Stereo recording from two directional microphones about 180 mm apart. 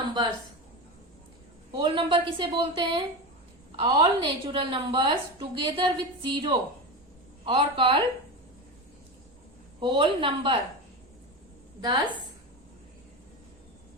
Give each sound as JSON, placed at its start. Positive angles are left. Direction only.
{"t": 1.7, "sound": "a woman's voice", "side_deg": -25}
{"t": 9.8, "sound": "a woman's voice", "side_deg": -30}
{"t": 11.8, "sound": "a woman's voice", "side_deg": -25}